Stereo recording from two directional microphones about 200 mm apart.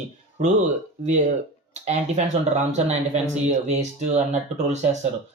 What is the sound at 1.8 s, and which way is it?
Speech, 35° right (ahead or behind).